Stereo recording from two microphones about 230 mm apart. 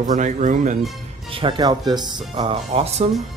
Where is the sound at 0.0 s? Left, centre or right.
Right.